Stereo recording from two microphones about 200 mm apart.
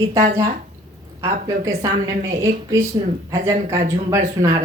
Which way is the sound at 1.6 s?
15° right (ahead or behind).